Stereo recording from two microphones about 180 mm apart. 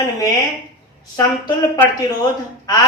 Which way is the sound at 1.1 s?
20° left (ahead or behind).